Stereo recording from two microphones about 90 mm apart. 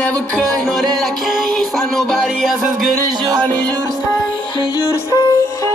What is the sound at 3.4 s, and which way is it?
Music, 20° left (ahead or behind).